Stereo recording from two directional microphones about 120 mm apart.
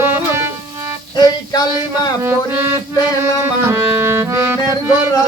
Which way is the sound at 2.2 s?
20° right (ahead or behind).